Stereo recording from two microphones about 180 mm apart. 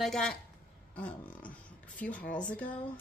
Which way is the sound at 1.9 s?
5° left (ahead or behind).